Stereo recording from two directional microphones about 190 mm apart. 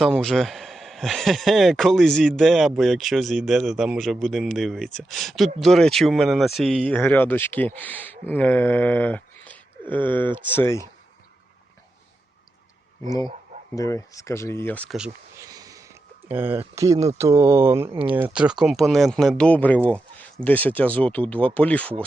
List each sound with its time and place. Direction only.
0.0 s speech: 5° left (ahead or behind)
13.7 s speech: 15° left (ahead or behind)
15.4 s a sound: 20° right (ahead or behind)
16.3 s speech: 10° right (ahead or behind); by 21.9 s 5° left (ahead or behind)